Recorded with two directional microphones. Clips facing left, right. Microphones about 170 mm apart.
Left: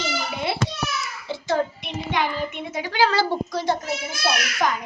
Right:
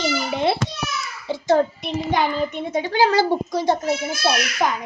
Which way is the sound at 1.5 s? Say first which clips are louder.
Right 6 dB; 35° right (ahead or behind).